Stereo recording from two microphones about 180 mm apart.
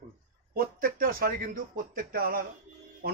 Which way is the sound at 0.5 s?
55° right (ahead or behind).